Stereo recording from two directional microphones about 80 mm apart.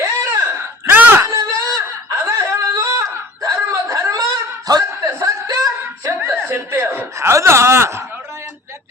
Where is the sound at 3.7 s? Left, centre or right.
Right.